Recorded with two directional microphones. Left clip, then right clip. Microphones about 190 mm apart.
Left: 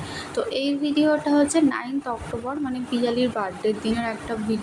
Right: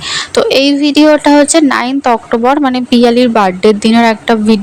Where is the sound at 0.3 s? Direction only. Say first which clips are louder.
Right 16 dB; 50° right (ahead or behind).